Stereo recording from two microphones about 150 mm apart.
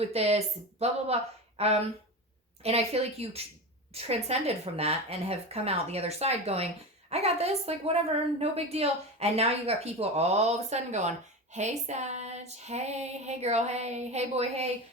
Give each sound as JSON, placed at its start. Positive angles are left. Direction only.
{"t": 0.0, "sound": "a woman's voice", "side_deg": -45}